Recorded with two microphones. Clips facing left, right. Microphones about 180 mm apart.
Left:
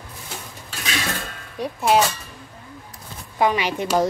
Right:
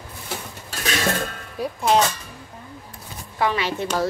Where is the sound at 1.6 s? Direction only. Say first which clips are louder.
Left 1 dB; 5° left (ahead or behind).